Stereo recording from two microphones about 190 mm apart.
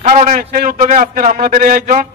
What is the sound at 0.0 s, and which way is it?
A man's voice, 40° right (ahead or behind).